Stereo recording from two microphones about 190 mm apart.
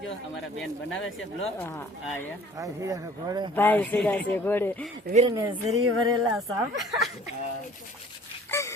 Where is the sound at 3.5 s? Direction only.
10° left (ahead or behind).